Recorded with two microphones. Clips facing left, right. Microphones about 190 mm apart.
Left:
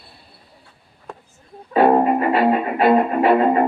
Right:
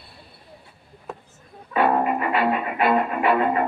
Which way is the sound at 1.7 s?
35° left (ahead or behind).